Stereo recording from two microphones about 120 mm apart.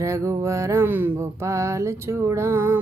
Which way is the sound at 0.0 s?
25° right (ahead or behind).